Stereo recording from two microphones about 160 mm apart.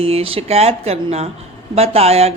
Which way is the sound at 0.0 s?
35° right (ahead or behind).